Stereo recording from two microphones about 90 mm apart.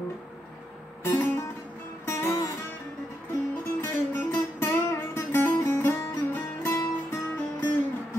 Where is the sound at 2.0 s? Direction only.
30° left (ahead or behind).